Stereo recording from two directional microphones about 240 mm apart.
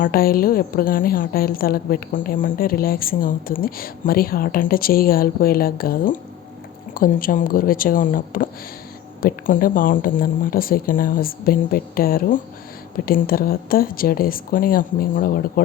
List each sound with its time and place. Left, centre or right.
0.0 s a woman's voice: left